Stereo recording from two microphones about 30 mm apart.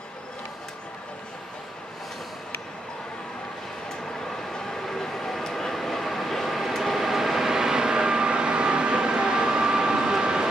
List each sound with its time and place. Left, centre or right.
4.5 s train: centre
5.5 s vehicle: centre; by 10.1 s right